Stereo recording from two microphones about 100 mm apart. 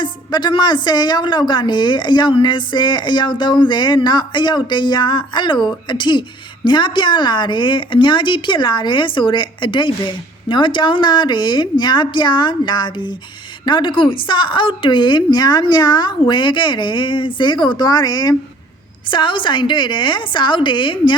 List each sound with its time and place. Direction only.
0.0 s a woman's voice: 50° left (ahead or behind)
19.1 s a woman's voice: 55° left (ahead or behind)